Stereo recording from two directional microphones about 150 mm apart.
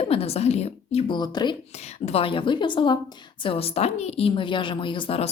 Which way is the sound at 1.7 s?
45° left (ahead or behind).